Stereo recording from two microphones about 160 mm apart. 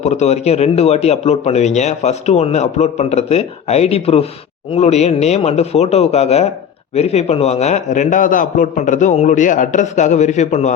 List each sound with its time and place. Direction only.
0.0 s speech: 45° left (ahead or behind)